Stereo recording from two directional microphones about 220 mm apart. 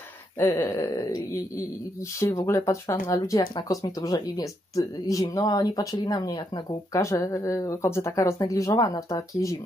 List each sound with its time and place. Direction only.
0.4 s speech: 15° left (ahead or behind)